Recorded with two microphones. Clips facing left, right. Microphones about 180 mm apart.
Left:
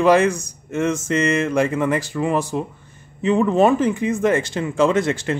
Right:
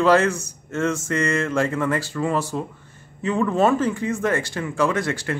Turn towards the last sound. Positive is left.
turn(degrees=20)  # may be behind; listen again after turning